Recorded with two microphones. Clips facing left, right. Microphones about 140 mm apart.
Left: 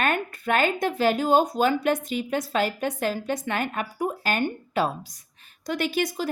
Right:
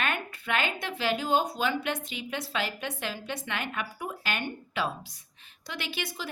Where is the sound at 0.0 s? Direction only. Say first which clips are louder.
Left 7 dB; 45° left (ahead or behind).